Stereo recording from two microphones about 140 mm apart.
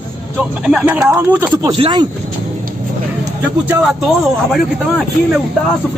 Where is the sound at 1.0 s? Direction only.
15° right (ahead or behind).